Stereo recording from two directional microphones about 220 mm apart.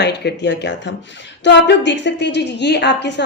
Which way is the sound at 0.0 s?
50° left (ahead or behind).